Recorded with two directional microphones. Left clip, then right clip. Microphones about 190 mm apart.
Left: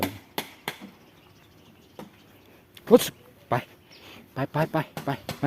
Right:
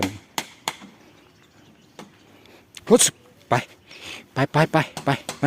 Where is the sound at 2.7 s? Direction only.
35° right (ahead or behind).